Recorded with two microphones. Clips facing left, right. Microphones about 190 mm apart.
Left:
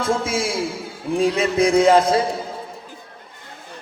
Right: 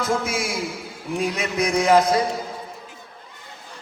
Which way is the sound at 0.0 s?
30° left (ahead or behind).